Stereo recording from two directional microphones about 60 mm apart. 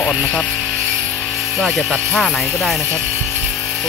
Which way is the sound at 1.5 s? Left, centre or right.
Centre.